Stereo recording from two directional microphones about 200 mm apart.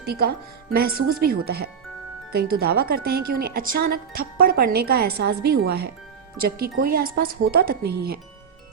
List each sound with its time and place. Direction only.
0.0 s speech: 55° right (ahead or behind)